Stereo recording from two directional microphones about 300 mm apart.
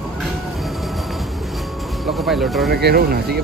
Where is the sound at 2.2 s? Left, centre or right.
Centre.